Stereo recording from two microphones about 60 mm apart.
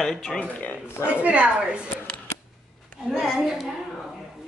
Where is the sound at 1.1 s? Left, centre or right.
Right.